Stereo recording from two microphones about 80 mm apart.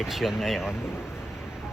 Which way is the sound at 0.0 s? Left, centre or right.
Centre.